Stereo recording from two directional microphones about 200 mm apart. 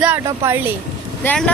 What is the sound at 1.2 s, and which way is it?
Speech, 5° left (ahead or behind).